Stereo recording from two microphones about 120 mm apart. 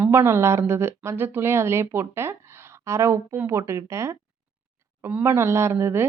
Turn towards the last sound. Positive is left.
turn(degrees=-20)  # may be behind; listen again after turning